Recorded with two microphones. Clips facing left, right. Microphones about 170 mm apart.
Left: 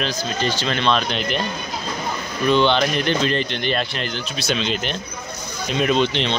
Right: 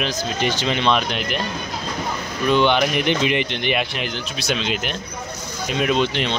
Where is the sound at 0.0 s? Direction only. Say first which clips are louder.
Right 1 dB; 15° right (ahead or behind).